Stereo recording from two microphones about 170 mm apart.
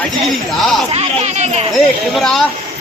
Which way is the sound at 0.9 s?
40° right (ahead or behind).